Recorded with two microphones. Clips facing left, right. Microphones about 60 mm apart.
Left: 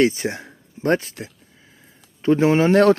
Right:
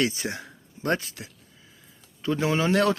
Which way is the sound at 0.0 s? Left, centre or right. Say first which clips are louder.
Left 8 dB; left.